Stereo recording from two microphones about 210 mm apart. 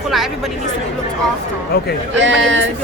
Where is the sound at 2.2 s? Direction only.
60° right (ahead or behind).